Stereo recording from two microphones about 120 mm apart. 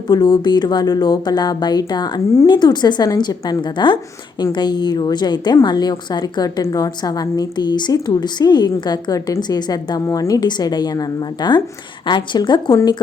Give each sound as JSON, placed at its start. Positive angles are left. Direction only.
{"t": 0.1, "sound": "a woman's voice", "side_deg": 35}